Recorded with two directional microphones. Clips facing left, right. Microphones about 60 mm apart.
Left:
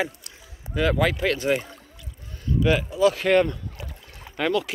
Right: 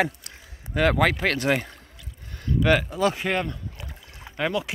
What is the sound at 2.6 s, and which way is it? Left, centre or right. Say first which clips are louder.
Speech: left 1 dB; right.